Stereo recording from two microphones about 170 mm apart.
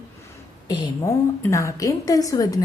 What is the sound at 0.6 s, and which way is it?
A woman's voice, 20° left (ahead or behind).